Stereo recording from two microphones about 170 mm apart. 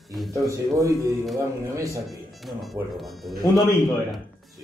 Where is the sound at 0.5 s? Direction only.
20° right (ahead or behind).